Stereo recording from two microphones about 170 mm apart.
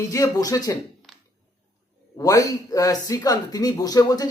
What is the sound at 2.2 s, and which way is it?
Speech, 20° left (ahead or behind).